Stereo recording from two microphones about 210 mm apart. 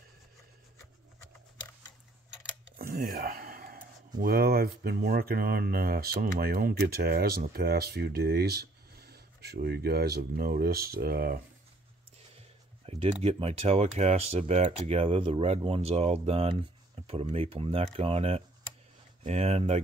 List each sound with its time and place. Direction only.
2.8 s speech: 45° right (ahead or behind)
12.4 s speech: 30° right (ahead or behind)